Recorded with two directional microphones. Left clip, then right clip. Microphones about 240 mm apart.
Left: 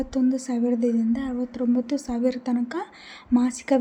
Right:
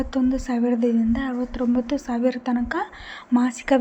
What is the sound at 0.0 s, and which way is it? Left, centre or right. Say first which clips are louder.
A woman's voice: right 1 dB; centre.